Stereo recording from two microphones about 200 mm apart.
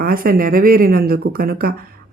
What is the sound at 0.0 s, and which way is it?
Speech, 45° right (ahead or behind).